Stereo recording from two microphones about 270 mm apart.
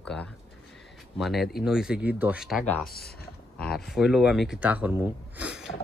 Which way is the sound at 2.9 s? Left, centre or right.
Left.